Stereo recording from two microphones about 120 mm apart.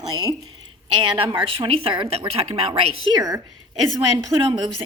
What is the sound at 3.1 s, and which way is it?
A woman's voice, 30° right (ahead or behind).